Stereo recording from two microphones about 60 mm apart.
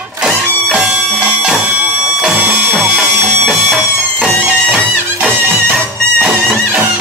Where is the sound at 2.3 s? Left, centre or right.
Right.